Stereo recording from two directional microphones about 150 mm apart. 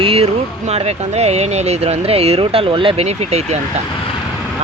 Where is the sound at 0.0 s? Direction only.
40° right (ahead or behind).